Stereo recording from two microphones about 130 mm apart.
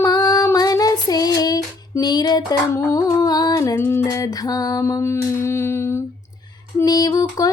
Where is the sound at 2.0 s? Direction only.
35° left (ahead or behind).